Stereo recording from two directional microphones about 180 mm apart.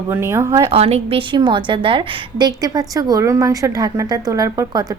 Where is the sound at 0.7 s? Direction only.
35° right (ahead or behind).